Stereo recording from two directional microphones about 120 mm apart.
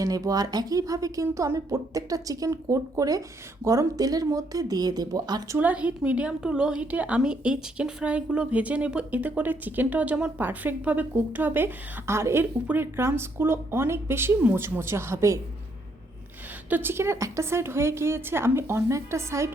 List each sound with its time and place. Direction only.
0.0 s speech: 30° right (ahead or behind)
5.5 s a woman's voice: 10° right (ahead or behind)
16.6 s speech: 15° right (ahead or behind)